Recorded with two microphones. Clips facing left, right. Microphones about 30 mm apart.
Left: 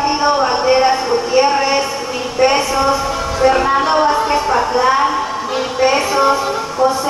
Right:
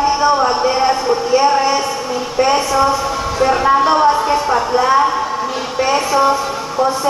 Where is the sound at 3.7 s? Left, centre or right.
Centre.